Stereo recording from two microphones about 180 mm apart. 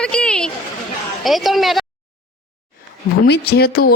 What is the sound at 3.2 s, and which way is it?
Speech, 65° left (ahead or behind).